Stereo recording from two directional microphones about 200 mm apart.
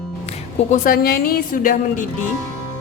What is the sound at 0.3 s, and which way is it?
Music, 30° left (ahead or behind).